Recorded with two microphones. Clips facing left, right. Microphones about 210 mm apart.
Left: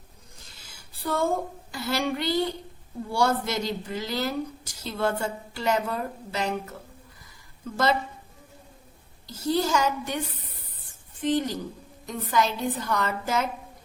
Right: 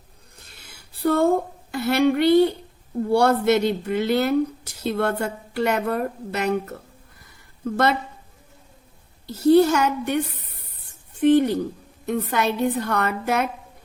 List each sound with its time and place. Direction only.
0.4 s a sound: 60° right (ahead or behind)
3.1 s a woman's voice: 60° right (ahead or behind)
9.2 s a woman's voice: 60° right (ahead or behind)